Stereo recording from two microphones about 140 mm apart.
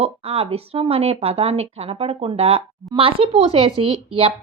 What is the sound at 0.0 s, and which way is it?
A woman's voice, 45° right (ahead or behind).